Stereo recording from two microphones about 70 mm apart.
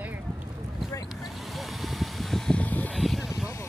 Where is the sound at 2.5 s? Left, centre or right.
Left.